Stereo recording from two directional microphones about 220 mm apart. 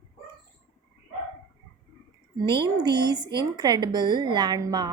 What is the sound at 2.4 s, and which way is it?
A woman's voice, 20° right (ahead or behind).